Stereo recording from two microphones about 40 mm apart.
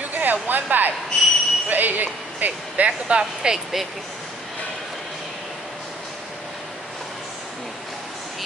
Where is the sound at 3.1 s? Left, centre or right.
Right.